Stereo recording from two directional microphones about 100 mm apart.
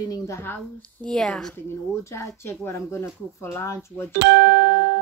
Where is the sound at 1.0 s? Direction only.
5° left (ahead or behind).